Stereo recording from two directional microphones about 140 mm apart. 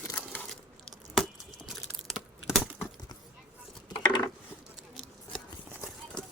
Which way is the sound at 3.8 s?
30° left (ahead or behind).